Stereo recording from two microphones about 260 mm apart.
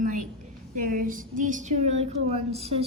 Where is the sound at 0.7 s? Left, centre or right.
Right.